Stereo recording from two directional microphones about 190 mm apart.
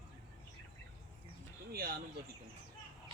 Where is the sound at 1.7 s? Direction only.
55° right (ahead or behind).